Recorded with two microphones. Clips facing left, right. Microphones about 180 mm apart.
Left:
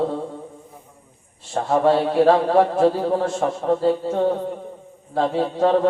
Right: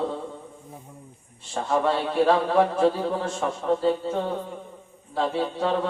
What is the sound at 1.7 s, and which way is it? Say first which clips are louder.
A man's voice: left 6 dB; 40° left (ahead or behind).